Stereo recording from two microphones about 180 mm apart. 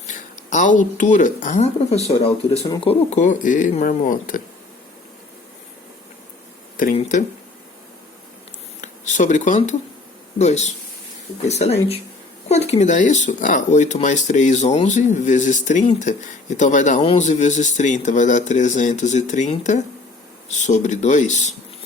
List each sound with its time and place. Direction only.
0.1 s speech: 45° left (ahead or behind)
6.7 s speech: 45° left (ahead or behind)
8.8 s a sound: 45° left (ahead or behind)
10.3 s speech: 40° left (ahead or behind)